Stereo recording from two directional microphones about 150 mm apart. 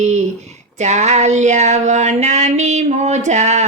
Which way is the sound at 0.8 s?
50° right (ahead or behind).